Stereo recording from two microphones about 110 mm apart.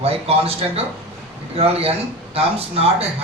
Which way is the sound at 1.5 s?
65° right (ahead or behind).